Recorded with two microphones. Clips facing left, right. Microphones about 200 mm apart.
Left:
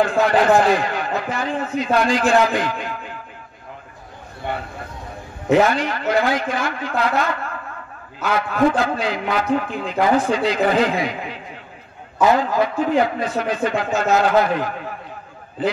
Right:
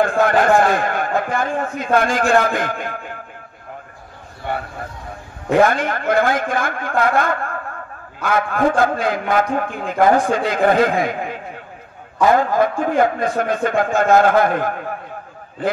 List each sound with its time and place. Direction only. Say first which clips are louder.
0.0 s a man's voice: right 1 dB; 50° right (ahead or behind)
5.5 s a man's voice: right 1 dB; 50° right (ahead or behind)